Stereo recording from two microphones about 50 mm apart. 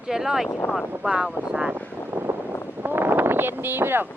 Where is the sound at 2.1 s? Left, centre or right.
Right.